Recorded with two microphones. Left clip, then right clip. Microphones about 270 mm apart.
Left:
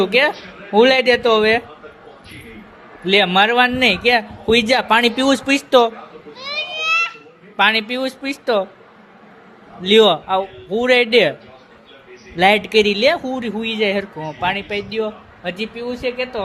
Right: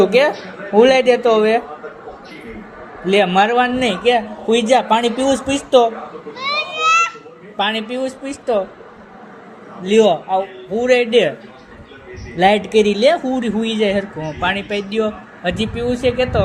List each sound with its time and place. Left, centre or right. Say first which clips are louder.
0.0 s speech: right 2 dB; left
3.1 s speech: even; left
6.5 s children playing: right 4 dB; left
7.5 s speech: left 4 dB; left
9.8 s speech: left 1 dB; left
12.4 s speech: even; left